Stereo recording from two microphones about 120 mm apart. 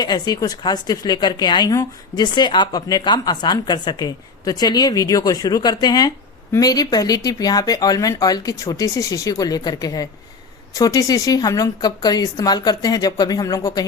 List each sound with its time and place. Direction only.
0.0 s speech: 35° left (ahead or behind)